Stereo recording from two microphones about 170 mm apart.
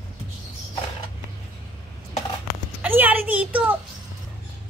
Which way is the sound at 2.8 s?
10° right (ahead or behind).